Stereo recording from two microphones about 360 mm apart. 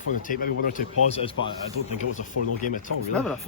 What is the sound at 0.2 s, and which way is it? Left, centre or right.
Speech, left.